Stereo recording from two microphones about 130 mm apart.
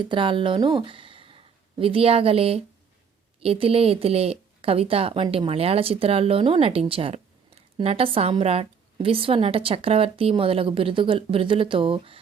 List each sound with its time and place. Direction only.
0.0 s a woman's voice: 40° right (ahead or behind)